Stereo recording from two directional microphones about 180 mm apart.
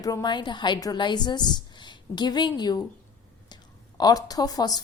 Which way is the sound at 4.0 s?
20° left (ahead or behind).